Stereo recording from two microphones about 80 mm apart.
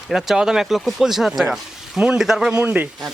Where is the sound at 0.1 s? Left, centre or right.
Centre.